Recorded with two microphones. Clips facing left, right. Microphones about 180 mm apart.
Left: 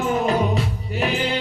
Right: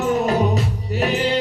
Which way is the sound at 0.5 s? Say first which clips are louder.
Right 2 dB; 40° right (ahead or behind).